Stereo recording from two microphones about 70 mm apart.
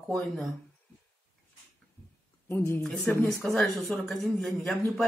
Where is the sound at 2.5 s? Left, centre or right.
Left.